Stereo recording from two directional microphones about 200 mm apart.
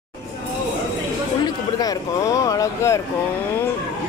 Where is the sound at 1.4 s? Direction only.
20° left (ahead or behind).